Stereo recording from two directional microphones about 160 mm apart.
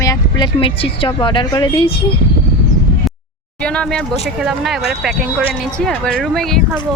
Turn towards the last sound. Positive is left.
turn(degrees=5)  # may be behind; listen again after turning